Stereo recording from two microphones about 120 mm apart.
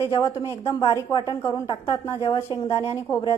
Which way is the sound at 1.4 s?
30° left (ahead or behind).